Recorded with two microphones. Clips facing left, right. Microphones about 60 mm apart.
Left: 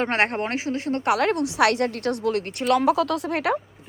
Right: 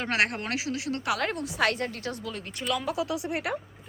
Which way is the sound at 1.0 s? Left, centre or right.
Left.